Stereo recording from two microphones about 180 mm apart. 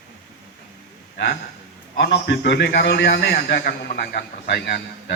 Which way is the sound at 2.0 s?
70° left (ahead or behind).